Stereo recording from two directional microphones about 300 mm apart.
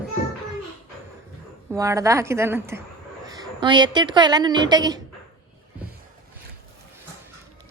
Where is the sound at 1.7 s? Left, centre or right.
Centre.